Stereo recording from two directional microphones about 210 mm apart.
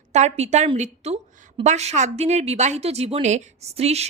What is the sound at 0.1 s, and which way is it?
A woman's voice, 35° right (ahead or behind).